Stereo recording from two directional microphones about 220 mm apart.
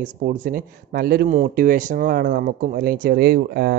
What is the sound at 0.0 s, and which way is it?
Speech, 35° right (ahead or behind).